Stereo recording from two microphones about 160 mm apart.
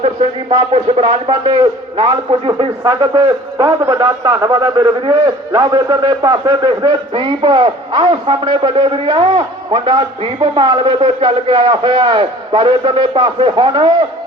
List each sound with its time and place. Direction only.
0.7 s a man's voice: 35° right (ahead or behind)